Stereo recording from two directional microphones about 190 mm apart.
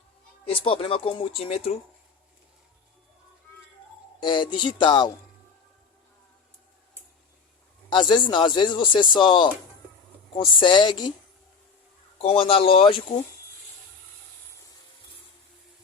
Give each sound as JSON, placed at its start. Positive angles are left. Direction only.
{"t": 0.4, "sound": "speech", "side_deg": 30}
{"t": 4.2, "sound": "speech", "side_deg": 25}
{"t": 7.9, "sound": "speech", "side_deg": 25}
{"t": 12.2, "sound": "speech", "side_deg": 30}